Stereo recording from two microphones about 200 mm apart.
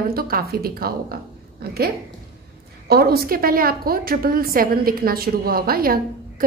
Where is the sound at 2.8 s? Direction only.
50° right (ahead or behind).